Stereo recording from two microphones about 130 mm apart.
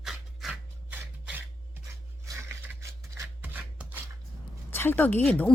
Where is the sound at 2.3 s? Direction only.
25° right (ahead or behind).